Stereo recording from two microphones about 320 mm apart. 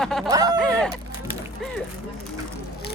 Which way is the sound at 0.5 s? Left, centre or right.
Centre.